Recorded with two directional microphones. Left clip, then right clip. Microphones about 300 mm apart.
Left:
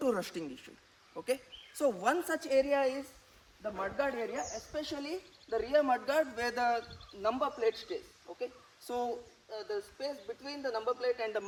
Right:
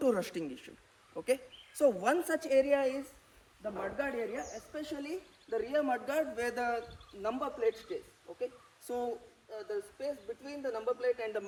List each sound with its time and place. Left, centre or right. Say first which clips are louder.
0.0 s speech: right 2 dB; centre
8.3 s speech: even; left
9.5 s speech: even; centre